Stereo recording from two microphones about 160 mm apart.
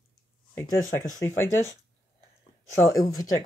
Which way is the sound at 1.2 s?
20° left (ahead or behind).